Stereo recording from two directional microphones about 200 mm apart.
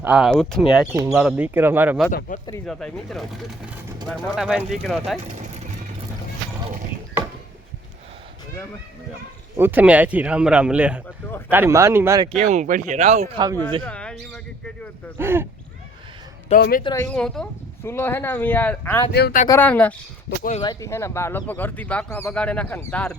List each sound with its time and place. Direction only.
0.0 s speech: 5° right (ahead or behind)
2.3 s speech: 40° left (ahead or behind)
2.6 s speech: centre (ahead or behind)
9.6 s speech: 10° right (ahead or behind)
11.3 s speech: 10° left (ahead or behind)
11.5 s speech: 15° right (ahead or behind)
12.4 s speech: 35° right (ahead or behind)
13.8 s speech: 5° left (ahead or behind)
15.2 s speech: 10° right (ahead or behind)
16.6 s speech: 50° left (ahead or behind)
16.8 s speech: 15° left (ahead or behind)
19.1 s speech: 55° left (ahead or behind)
19.5 s speech: 10° left (ahead or behind)
20.6 s speech: 20° left (ahead or behind)